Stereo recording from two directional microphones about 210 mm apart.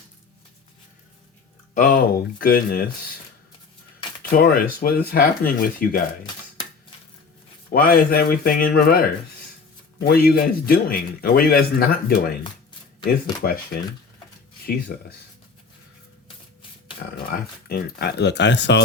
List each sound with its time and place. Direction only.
1.7 s speech: 40° left (ahead or behind)
4.2 s speech: 45° left (ahead or behind)
7.7 s speech: 45° left (ahead or behind)
13.4 s speech: 45° left (ahead or behind)
14.9 s speech: 45° left (ahead or behind)
17.3 s speech: 45° left (ahead or behind)